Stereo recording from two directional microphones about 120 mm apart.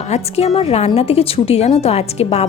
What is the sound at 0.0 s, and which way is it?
A woman's voice, 60° left (ahead or behind).